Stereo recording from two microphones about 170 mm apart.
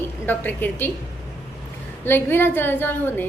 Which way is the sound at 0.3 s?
10° left (ahead or behind).